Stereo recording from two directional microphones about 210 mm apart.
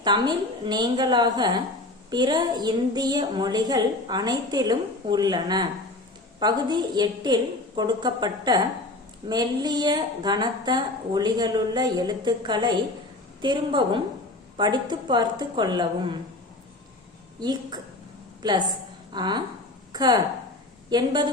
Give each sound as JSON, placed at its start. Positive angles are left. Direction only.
{"t": 0.0, "sound": "a woman's voice", "side_deg": -20}
{"t": 17.4, "sound": "a woman's voice", "side_deg": -20}